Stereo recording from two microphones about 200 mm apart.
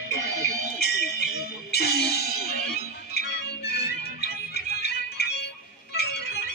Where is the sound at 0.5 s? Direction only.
55° left (ahead or behind).